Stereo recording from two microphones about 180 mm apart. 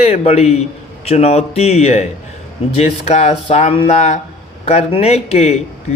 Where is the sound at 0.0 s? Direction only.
35° left (ahead or behind).